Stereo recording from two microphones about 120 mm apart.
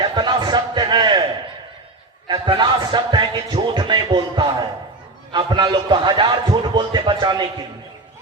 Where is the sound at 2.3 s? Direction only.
40° right (ahead or behind).